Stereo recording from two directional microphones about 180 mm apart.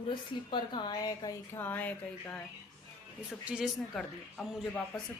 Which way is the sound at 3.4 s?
5° right (ahead or behind).